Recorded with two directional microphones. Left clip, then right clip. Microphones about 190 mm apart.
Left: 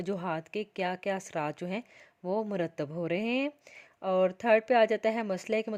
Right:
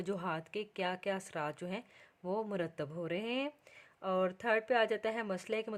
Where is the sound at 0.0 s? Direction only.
20° left (ahead or behind).